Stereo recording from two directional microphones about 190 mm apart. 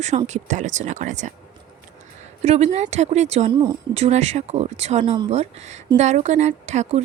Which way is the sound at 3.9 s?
35° right (ahead or behind).